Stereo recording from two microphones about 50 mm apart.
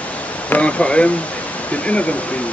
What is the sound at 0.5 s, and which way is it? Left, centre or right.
Speech, left.